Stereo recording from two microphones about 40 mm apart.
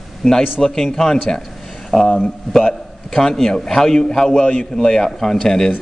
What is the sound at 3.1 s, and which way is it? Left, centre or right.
A man's voice, centre.